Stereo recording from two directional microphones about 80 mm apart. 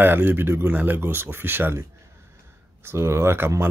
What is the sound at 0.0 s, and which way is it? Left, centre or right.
Speech, right.